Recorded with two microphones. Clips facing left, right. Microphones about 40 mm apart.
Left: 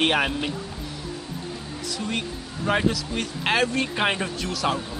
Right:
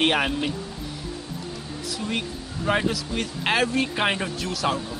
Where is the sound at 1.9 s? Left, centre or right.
Centre.